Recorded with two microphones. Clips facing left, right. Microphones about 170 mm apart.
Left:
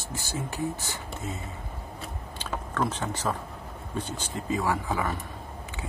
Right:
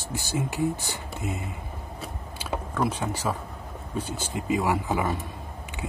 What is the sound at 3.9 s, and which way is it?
Speech, 10° right (ahead or behind).